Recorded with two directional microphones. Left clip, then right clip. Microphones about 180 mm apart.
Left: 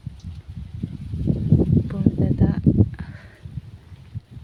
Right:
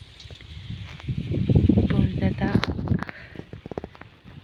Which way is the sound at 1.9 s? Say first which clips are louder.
Left 3 dB; 5° right (ahead or behind).